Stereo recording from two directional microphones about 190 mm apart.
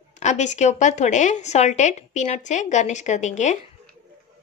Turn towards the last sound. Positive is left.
turn(degrees=40)  # may be behind; listen again after turning